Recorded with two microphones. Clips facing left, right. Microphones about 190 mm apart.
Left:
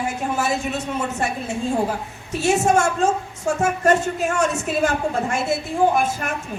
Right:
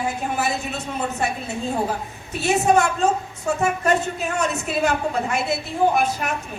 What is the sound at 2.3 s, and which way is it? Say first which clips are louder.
A woman's voice: even; 45° left (ahead or behind).